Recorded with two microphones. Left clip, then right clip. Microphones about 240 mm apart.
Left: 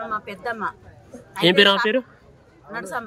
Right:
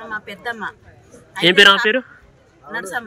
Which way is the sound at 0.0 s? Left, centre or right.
Centre.